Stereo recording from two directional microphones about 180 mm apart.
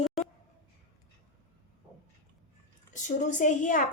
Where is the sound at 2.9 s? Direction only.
45° left (ahead or behind).